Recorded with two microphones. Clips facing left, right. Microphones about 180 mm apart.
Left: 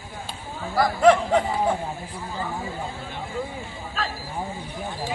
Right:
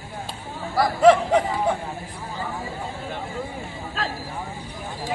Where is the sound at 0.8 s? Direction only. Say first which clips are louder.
Right 2 dB; centre (ahead or behind).